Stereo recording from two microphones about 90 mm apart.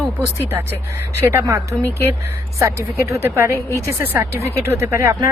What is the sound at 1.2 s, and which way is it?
Speech, 35° right (ahead or behind).